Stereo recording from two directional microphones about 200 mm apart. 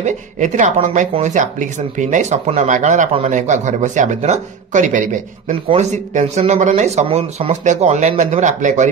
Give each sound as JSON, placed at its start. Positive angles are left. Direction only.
{"t": 0.0, "sound": "speech", "side_deg": -35}